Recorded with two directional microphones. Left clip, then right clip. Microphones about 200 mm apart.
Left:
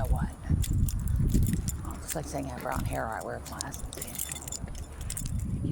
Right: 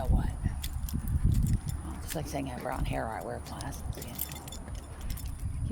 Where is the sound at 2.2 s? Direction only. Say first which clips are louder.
Even; 5° right (ahead or behind).